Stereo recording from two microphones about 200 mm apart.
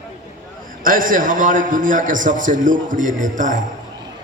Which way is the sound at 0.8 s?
45° right (ahead or behind).